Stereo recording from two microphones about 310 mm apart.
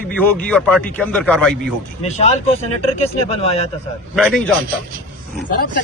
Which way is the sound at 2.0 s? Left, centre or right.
Left.